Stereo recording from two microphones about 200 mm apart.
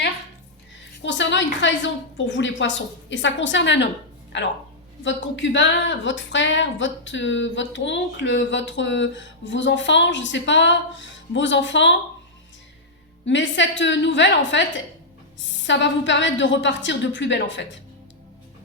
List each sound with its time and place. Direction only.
1.0 s a woman's voice: 65° left (ahead or behind)
13.2 s a woman's voice: 65° left (ahead or behind)